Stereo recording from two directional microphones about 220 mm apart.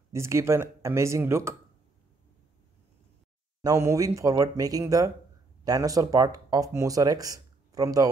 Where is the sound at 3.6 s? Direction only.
15° right (ahead or behind).